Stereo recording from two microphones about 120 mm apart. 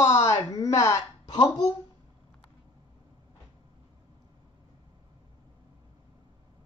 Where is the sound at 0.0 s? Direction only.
25° left (ahead or behind).